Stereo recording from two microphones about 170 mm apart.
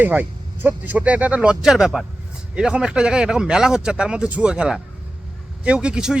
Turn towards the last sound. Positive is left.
turn(degrees=-5)  # may be behind; listen again after turning